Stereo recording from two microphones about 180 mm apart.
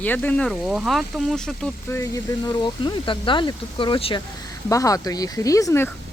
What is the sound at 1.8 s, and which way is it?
Speech, 15° left (ahead or behind).